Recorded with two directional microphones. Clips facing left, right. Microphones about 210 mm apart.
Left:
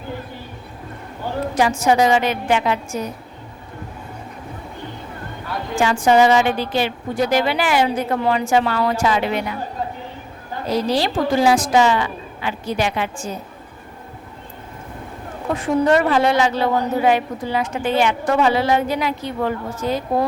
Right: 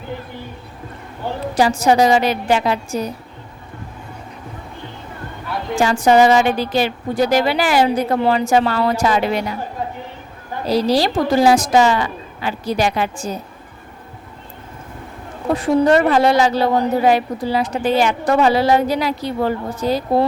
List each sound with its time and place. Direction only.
1.5 s a woman's voice: 35° right (ahead or behind)
5.7 s a woman's voice: 40° right (ahead or behind)
10.7 s a woman's voice: 35° right (ahead or behind)
15.5 s a woman's voice: 35° right (ahead or behind)